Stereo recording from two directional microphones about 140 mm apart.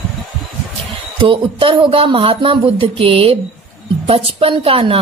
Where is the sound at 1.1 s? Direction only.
40° right (ahead or behind).